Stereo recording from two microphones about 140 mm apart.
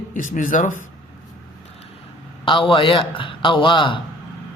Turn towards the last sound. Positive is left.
turn(degrees=35)  # may be behind; listen again after turning